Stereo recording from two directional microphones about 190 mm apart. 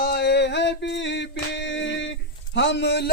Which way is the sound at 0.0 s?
60° left (ahead or behind).